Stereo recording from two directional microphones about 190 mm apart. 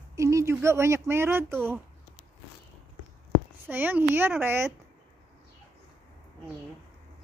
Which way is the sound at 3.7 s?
10° right (ahead or behind).